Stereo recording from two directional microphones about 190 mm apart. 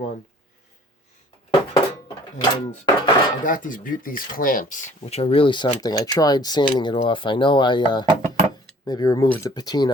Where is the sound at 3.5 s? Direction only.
45° left (ahead or behind).